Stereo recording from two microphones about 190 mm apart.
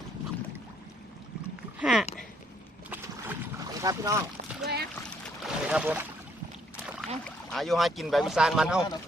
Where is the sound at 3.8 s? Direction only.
15° right (ahead or behind).